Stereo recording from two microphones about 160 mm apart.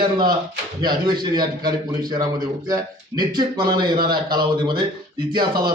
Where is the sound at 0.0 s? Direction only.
25° right (ahead or behind).